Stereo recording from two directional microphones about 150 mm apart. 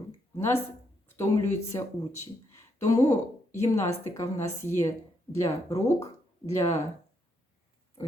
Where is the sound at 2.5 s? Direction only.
20° left (ahead or behind).